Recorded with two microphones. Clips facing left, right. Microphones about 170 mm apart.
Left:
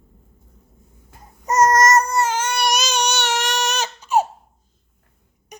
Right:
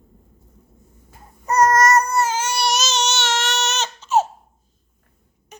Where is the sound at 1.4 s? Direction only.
20° left (ahead or behind).